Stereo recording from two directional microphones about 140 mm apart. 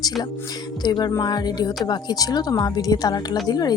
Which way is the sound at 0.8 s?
30° left (ahead or behind).